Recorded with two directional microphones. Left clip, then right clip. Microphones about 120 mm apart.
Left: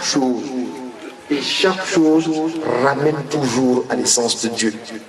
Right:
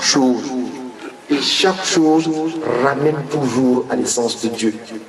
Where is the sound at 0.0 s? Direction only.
15° right (ahead or behind).